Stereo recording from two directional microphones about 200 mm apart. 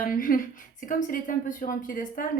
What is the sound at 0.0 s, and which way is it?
Speech, 45° left (ahead or behind).